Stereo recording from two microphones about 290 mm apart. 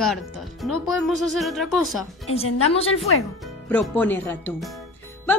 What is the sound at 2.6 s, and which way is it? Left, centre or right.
Speech, left.